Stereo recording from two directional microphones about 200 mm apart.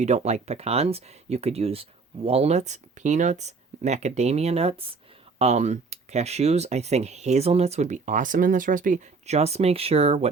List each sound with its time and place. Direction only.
0.0 s speech: 35° right (ahead or behind)